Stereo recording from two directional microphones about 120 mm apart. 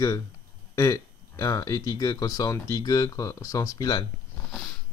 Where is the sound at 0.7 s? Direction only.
25° left (ahead or behind).